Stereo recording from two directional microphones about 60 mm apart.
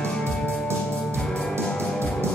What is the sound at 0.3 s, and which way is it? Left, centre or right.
Music, centre.